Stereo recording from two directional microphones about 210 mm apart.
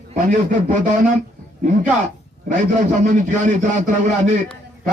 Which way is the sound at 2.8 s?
35° right (ahead or behind).